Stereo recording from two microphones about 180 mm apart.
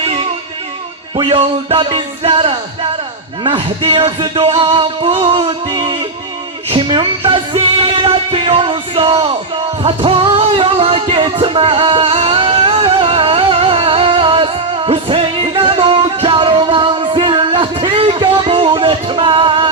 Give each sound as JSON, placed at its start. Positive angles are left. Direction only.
{"t": 1.1, "sound": "music", "side_deg": -30}